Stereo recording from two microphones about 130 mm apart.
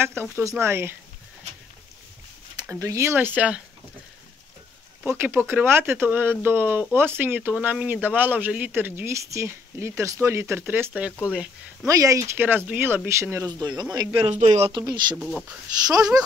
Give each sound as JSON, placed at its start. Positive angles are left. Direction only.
{"t": 0.0, "sound": "speech", "side_deg": -20}
{"t": 2.7, "sound": "speech", "side_deg": -25}
{"t": 5.0, "sound": "speech", "side_deg": -15}
{"t": 11.8, "sound": "speech", "side_deg": -25}
{"t": 13.5, "sound": "speech", "side_deg": -30}
{"t": 14.3, "sound": "speech", "side_deg": -60}
{"t": 14.7, "sound": "speech", "side_deg": -35}
{"t": 15.1, "sound": "speech", "side_deg": 0}
{"t": 15.9, "sound": "speech", "side_deg": -25}